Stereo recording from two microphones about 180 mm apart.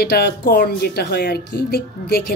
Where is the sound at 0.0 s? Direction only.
60° left (ahead or behind).